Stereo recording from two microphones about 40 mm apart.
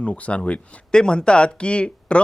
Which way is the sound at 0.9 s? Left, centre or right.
Left.